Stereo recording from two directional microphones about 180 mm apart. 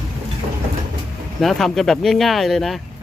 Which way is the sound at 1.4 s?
Centre (ahead or behind).